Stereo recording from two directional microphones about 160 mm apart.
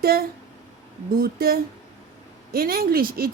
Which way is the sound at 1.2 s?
70° right (ahead or behind).